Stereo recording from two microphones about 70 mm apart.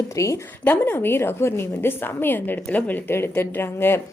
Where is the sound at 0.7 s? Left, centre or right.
Left.